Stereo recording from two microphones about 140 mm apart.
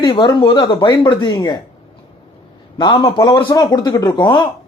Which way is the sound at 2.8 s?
25° left (ahead or behind).